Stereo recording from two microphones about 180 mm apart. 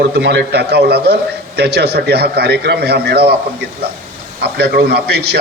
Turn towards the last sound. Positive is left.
turn(degrees=-65)  # may be behind; listen again after turning